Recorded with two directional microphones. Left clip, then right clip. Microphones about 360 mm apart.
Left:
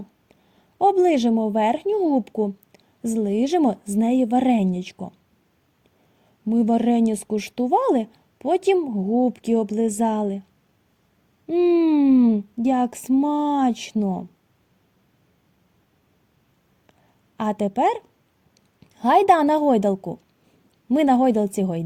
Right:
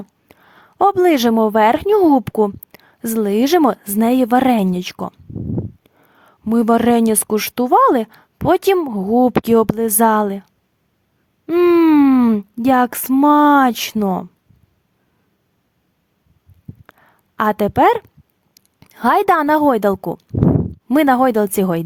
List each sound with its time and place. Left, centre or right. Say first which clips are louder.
0.3 s a sound: right 12 dB; right
1.1 s speech: right 7 dB; right
6.4 s speech: right 7 dB; right
11.4 s speech: right 6 dB; right
16.8 s a sound: right 11 dB; right
18.5 s a woman's voice: right 12 dB; right